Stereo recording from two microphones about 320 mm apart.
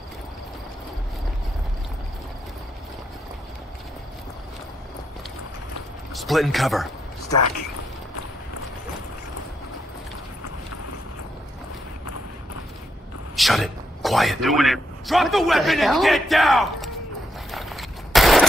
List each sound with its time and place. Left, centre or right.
6.1 s speech: centre
13.4 s a man's voice: centre
17.5 s a sound: centre